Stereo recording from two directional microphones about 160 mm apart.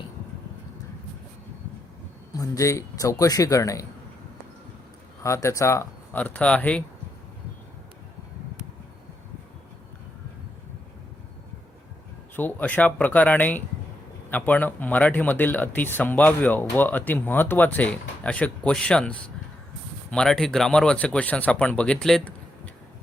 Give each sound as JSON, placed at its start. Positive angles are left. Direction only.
{"t": 2.3, "sound": "speech", "side_deg": 20}
{"t": 5.2, "sound": "speech", "side_deg": 15}
{"t": 12.4, "sound": "speech", "side_deg": 10}